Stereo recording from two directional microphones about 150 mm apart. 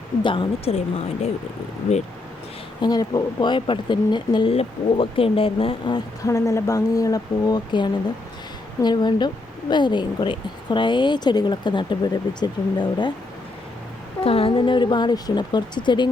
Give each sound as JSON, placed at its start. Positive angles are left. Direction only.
{"t": 0.2, "sound": "speech", "side_deg": 35}
{"t": 2.8, "sound": "a woman's voice", "side_deg": 25}
{"t": 14.3, "sound": "speech", "side_deg": 40}